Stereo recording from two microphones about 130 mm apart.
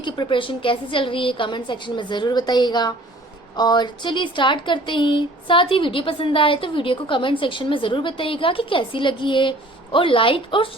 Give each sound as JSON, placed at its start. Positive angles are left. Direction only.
{"t": 0.0, "sound": "speech", "side_deg": 40}